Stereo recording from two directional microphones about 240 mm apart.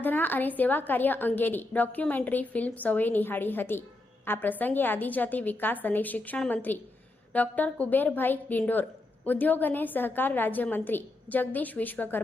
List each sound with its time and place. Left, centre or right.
0.0 s a woman's voice: centre